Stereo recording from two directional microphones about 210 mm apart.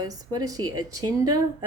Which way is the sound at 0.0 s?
15° right (ahead or behind).